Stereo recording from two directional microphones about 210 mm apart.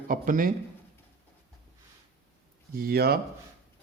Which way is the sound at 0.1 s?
40° right (ahead or behind).